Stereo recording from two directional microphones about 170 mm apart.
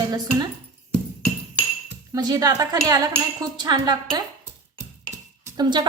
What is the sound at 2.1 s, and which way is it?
A woman's voice, 20° right (ahead or behind).